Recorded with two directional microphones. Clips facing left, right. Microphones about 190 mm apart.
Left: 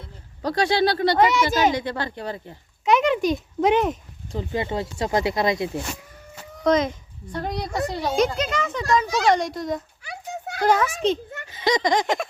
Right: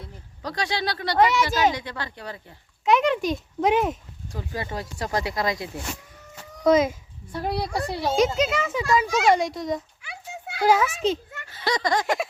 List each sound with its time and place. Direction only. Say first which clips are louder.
0.4 s speech: left 7 dB; 30° left (ahead or behind)
1.1 s speech: left 1 dB; centre (ahead or behind)
1.7 s speech: left 6 dB; 30° left (ahead or behind)
2.8 s speech: left 2 dB; centre (ahead or behind)
4.3 s speech: left 6 dB; 25° left (ahead or behind)
6.6 s a woman's voice: right 1 dB; 5° right (ahead or behind)
7.7 s speech: left 2 dB; 20° left (ahead or behind)
8.1 s speech: right 2 dB; centre (ahead or behind)
10.0 s a sound: left 5 dB; 40° left (ahead or behind)
10.6 s speech: even; 5° right (ahead or behind)
11.4 s a sound: left 4 dB; 20° left (ahead or behind)